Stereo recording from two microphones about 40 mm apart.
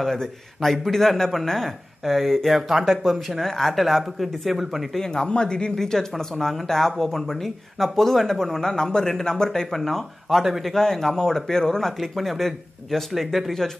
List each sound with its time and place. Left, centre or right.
0.0 s speech: centre
4.9 s speech: centre
5.8 s speech: centre
9.5 s speech: centre
10.7 s speech: centre
12.0 s speech: centre